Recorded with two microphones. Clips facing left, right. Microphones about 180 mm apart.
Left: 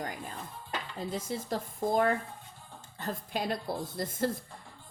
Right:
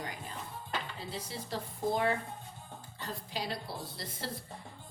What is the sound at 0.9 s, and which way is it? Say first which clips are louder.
Speech: left 6 dB; 45° left (ahead or behind).